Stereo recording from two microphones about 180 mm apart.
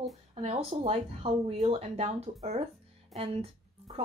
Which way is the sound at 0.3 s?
35° right (ahead or behind).